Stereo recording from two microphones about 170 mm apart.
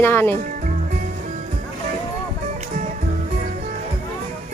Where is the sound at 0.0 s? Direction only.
15° left (ahead or behind).